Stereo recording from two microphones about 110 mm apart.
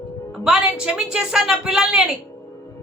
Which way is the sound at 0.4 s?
5° right (ahead or behind).